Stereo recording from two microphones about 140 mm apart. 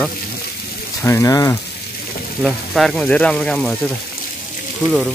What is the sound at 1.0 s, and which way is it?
Speech, 20° left (ahead or behind).